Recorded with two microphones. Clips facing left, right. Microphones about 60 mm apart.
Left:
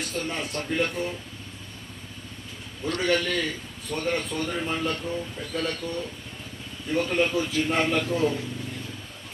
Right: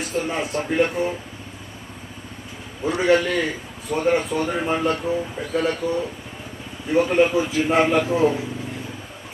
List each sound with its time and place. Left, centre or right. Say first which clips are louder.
0.0 s a man's voice: right 6 dB; centre
2.8 s a man's voice: right 7 dB; centre